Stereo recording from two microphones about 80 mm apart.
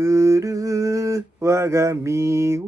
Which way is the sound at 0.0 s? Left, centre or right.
Right.